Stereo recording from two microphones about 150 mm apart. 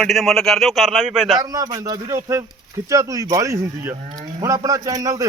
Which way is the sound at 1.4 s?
25° right (ahead or behind).